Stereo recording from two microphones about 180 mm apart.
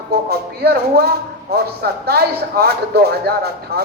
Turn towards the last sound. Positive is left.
turn(degrees=-60)  # may be behind; listen again after turning